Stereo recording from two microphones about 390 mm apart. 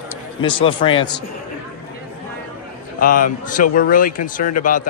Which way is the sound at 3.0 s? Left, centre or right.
Left.